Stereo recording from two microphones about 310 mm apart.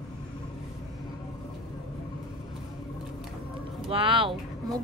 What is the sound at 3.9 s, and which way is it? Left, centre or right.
Speech, centre.